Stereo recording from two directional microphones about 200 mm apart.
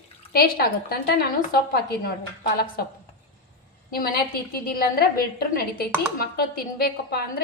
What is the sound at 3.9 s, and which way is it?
A woman's voice, 50° left (ahead or behind).